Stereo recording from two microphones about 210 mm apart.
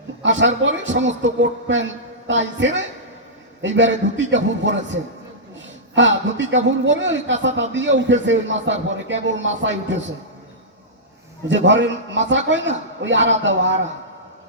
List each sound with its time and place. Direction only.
0.2 s a man's voice: 60° right (ahead or behind)
11.4 s a man's voice: 60° right (ahead or behind)